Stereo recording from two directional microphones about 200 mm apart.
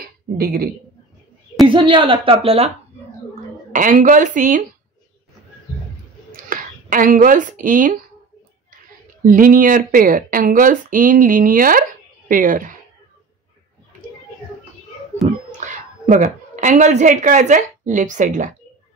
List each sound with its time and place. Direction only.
0.0 s a sound: 50° right (ahead or behind)
1.7 s a woman's voice: 25° right (ahead or behind)
3.7 s speech: 40° right (ahead or behind)
6.5 s speech: 45° right (ahead or behind)
9.2 s speech: 45° right (ahead or behind)
15.5 s a woman's voice: 40° right (ahead or behind)